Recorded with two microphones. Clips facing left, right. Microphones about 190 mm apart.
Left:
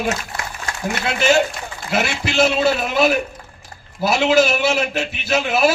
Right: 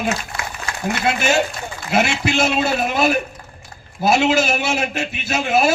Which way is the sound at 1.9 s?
50° right (ahead or behind).